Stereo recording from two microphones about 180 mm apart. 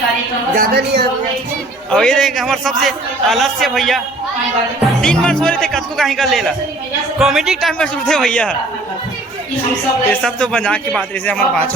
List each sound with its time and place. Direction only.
0.5 s speech: 60° right (ahead or behind)
1.9 s a man's voice: 5° left (ahead or behind)
10.1 s a man's voice: 5° left (ahead or behind)